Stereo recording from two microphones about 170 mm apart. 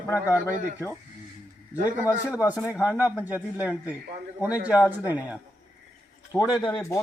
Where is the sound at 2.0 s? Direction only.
10° right (ahead or behind).